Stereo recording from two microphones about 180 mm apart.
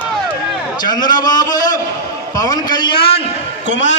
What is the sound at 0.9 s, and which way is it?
A man's voice, 25° left (ahead or behind).